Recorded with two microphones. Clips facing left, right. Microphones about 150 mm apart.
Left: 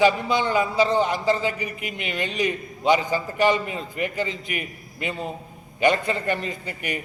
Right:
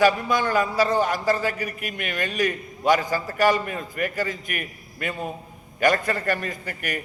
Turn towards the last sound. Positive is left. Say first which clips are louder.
# left 1 dB
turn(degrees=20)  # may be behind; listen again after turning